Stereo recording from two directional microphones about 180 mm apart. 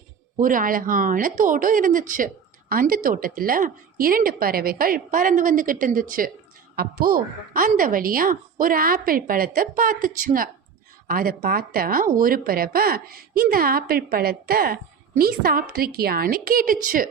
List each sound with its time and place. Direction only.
0.3 s speech: 50° right (ahead or behind)